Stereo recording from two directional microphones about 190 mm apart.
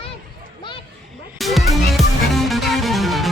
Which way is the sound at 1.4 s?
Centre (ahead or behind).